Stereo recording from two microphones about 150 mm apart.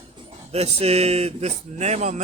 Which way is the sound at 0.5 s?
45° right (ahead or behind).